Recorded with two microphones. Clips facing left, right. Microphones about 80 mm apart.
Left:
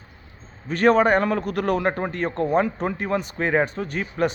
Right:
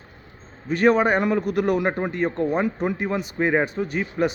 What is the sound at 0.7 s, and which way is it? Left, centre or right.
A man's voice, centre.